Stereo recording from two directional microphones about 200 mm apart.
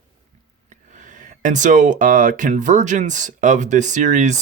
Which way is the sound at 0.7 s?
40° right (ahead or behind).